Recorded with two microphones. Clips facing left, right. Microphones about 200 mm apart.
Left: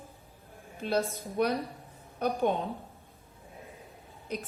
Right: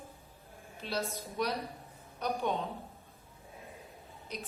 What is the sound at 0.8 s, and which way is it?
Speech, 50° left (ahead or behind).